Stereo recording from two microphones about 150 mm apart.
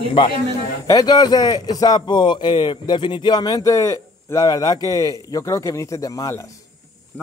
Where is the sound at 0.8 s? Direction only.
25° left (ahead or behind).